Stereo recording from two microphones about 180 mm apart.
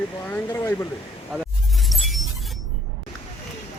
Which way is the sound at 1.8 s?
Centre (ahead or behind).